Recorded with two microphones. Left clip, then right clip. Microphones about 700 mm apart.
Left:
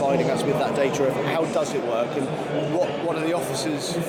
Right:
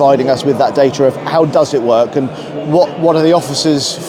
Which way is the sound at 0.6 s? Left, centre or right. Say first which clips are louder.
Right 12 dB; right.